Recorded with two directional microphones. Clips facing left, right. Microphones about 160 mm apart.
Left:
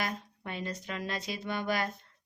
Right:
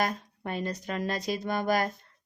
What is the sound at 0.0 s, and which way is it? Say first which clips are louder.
A woman's voice: right 6 dB; 45° right (ahead or behind).